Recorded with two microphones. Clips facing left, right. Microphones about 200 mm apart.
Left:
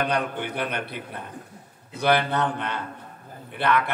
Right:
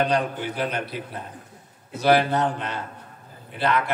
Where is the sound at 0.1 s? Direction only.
55° left (ahead or behind).